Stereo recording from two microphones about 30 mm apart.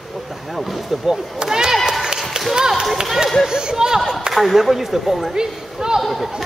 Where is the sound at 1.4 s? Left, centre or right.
Right.